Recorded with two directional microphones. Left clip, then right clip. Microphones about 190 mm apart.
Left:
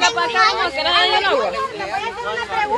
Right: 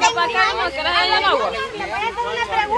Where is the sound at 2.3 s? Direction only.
5° right (ahead or behind).